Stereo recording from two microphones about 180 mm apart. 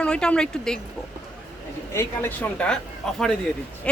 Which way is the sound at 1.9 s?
15° left (ahead or behind).